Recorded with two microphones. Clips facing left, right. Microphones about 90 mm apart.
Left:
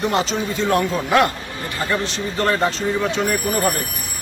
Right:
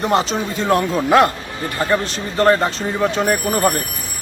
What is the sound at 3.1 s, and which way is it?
Speech, 40° right (ahead or behind).